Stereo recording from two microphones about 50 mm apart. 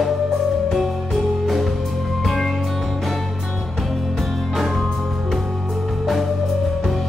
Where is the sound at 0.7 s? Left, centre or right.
Centre.